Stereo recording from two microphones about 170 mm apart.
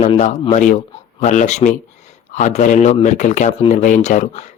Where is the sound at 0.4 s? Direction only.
45° left (ahead or behind).